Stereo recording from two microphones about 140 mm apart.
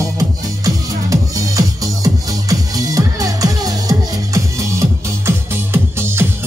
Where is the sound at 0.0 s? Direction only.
25° right (ahead or behind).